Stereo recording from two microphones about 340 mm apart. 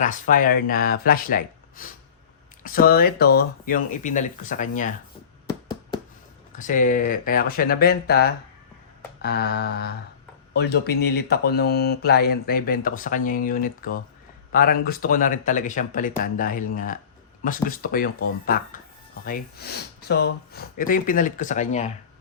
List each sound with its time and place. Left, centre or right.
0.0 s speech: left
5.5 s a sound: centre
6.5 s speech: left